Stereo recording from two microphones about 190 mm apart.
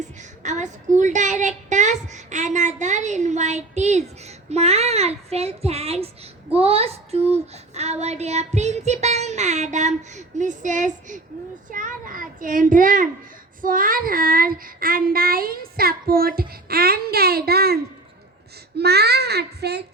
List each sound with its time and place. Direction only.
0.0 s a woman's voice: 40° right (ahead or behind)
11.7 s child singing: 45° right (ahead or behind)
18.8 s a child's voice: 60° right (ahead or behind)